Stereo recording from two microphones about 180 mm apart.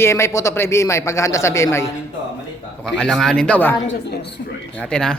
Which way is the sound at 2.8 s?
5° left (ahead or behind).